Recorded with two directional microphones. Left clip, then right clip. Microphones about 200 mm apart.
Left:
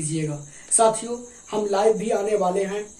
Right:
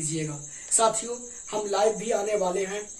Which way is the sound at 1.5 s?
10° left (ahead or behind).